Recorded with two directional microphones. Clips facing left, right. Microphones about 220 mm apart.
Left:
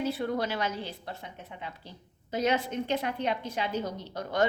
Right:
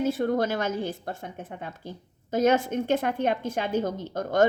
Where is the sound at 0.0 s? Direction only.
45° right (ahead or behind).